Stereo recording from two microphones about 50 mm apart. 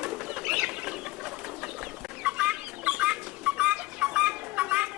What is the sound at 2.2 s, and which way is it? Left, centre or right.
Chicken, right.